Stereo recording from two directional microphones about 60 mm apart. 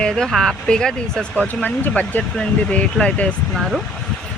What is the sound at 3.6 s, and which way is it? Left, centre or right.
Speech, centre.